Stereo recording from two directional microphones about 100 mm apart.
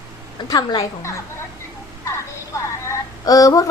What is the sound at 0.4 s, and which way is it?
Speech, 45° left (ahead or behind).